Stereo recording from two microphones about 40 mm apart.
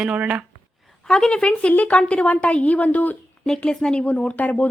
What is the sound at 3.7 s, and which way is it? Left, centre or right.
Speech, centre.